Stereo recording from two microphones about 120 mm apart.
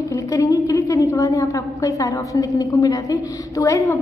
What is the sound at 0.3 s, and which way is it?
A woman's voice, 25° left (ahead or behind).